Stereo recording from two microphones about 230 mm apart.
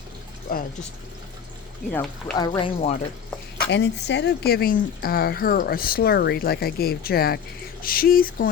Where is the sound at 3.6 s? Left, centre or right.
Left.